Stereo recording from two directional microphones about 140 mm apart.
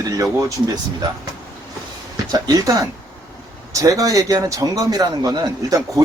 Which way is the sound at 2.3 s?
25° right (ahead or behind).